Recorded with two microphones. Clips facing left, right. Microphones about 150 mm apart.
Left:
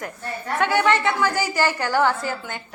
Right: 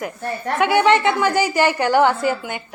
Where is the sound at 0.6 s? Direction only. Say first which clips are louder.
Right 4 dB; 15° right (ahead or behind).